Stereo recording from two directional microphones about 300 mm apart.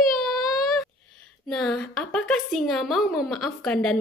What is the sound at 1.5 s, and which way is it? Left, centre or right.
A woman's voice, centre.